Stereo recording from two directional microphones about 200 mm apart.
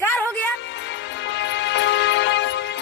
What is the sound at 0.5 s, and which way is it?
Music, 65° left (ahead or behind).